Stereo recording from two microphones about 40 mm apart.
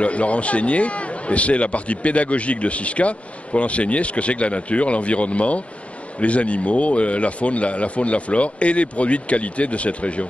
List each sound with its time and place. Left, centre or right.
0.0 s a man's voice: left